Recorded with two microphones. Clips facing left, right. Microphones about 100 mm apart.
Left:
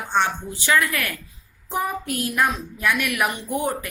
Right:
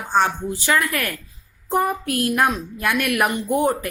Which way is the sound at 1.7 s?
55° right (ahead or behind).